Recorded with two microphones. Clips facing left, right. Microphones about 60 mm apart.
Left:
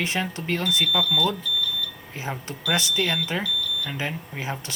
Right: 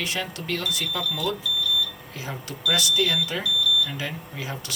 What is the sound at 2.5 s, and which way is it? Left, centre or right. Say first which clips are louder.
Speech: right 1 dB; left.